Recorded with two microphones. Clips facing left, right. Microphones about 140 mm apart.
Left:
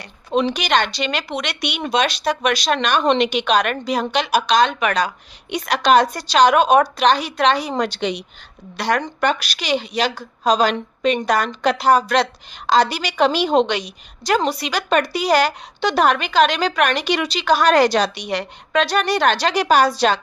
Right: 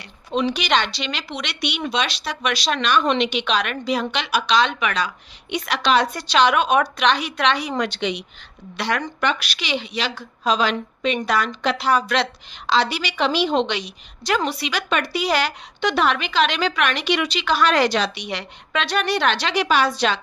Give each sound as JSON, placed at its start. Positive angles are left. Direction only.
{"t": 0.5, "sound": "a woman's voice", "side_deg": 50}
{"t": 9.2, "sound": "a woman's voice", "side_deg": 40}